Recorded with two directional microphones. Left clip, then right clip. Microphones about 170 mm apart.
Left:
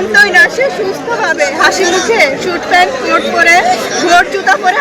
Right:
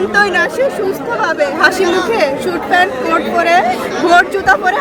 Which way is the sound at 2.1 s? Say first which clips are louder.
Left 4 dB; 20° right (ahead or behind).